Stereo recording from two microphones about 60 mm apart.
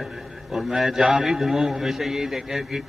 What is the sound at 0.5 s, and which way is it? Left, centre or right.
A man's voice, centre.